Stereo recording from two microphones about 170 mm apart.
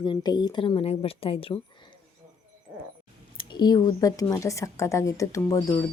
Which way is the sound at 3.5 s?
25° left (ahead or behind).